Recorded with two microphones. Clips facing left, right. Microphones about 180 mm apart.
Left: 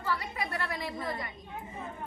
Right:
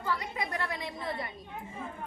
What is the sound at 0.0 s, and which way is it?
A woman's voice, 15° right (ahead or behind).